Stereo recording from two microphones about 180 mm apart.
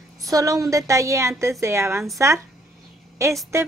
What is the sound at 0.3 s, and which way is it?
A woman's voice, 20° right (ahead or behind).